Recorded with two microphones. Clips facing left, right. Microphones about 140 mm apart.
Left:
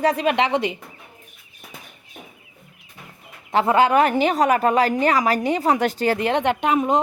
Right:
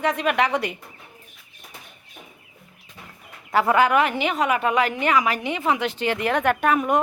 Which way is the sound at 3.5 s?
25° left (ahead or behind).